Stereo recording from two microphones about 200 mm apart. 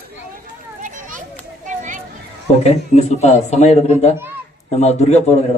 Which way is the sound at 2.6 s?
35° left (ahead or behind).